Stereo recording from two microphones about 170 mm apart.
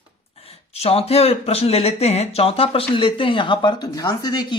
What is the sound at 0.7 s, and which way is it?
Speech, 35° left (ahead or behind).